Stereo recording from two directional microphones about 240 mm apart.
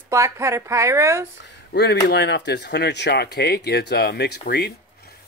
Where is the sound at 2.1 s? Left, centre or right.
Left.